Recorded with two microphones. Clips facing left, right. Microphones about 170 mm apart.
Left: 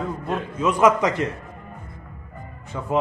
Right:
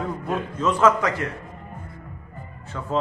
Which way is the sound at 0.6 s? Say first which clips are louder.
Left 2 dB; 15° left (ahead or behind).